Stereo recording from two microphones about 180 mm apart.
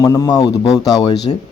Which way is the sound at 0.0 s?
20° left (ahead or behind).